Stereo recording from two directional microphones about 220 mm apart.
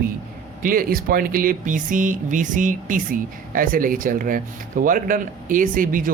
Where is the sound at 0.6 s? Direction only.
40° right (ahead or behind).